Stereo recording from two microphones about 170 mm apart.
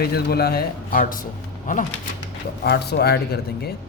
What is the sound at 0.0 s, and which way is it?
A man's voice, 70° left (ahead or behind).